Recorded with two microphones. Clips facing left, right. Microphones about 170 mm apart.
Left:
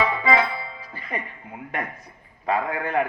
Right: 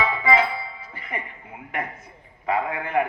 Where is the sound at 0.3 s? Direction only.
25° right (ahead or behind).